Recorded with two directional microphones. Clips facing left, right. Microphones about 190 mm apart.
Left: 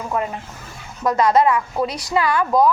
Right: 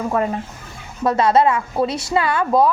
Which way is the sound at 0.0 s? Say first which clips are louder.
Right 4 dB; 35° right (ahead or behind).